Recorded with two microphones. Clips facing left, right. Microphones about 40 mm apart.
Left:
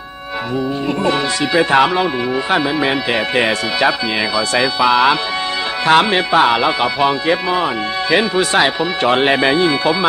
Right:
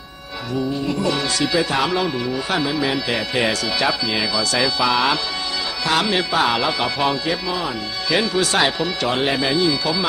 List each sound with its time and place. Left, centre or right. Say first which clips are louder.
0.9 s speech: left 4 dB; left
5.8 s speech: left 7 dB; left
7.3 s speech: left 7 dB; left
8.1 s speech: left 4 dB; left
9.0 s speech: left 9 dB; left